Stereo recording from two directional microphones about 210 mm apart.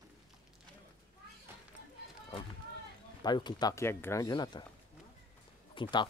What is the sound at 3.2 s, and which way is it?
Speech, 20° left (ahead or behind).